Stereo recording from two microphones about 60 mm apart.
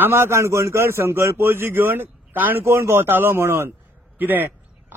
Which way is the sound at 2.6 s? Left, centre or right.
Right.